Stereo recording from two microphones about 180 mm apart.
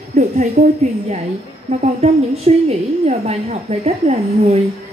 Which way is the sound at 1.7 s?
35° right (ahead or behind).